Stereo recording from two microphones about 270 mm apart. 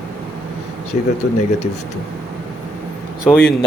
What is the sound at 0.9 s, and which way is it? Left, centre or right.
Speech, left.